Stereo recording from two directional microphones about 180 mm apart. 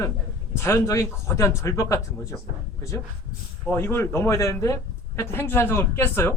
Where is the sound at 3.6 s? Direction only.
10° left (ahead or behind).